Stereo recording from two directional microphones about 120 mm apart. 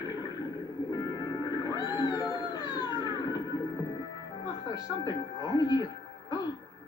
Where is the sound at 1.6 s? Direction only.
35° left (ahead or behind).